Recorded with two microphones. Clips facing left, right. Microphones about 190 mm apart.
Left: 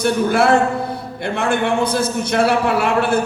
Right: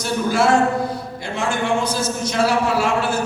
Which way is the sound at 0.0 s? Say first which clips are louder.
Left 3 dB; 60° left (ahead or behind).